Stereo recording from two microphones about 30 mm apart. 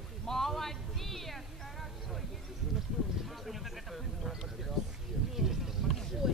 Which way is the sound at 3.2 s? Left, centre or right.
Centre.